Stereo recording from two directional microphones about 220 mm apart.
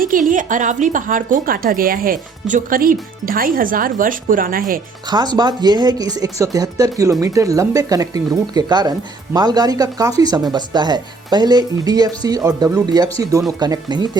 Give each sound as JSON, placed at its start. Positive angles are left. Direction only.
{"t": 0.0, "sound": "speech", "side_deg": -35}
{"t": 5.1, "sound": "speech", "side_deg": -20}